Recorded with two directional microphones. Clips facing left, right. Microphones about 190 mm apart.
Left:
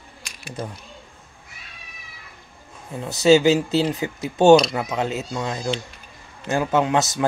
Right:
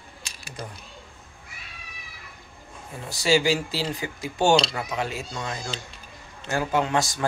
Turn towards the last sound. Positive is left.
turn(degrees=20)  # may be behind; listen again after turning